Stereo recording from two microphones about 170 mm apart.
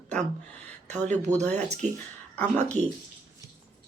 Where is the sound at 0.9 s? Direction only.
45° right (ahead or behind).